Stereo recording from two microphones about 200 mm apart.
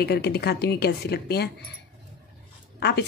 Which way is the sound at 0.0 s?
55° left (ahead or behind).